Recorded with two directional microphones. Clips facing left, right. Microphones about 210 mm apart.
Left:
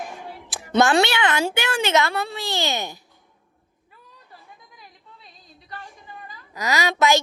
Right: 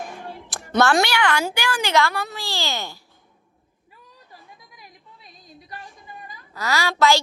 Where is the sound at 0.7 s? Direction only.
15° left (ahead or behind).